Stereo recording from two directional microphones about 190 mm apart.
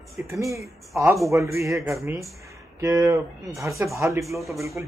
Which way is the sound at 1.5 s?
15° right (ahead or behind).